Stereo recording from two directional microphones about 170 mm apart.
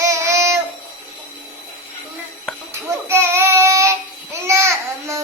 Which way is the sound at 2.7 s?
15° right (ahead or behind).